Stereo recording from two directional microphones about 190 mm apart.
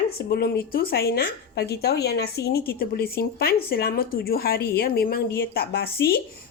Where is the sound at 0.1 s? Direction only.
55° left (ahead or behind).